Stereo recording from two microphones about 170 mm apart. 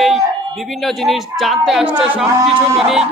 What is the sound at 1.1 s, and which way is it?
Speech, centre (ahead or behind).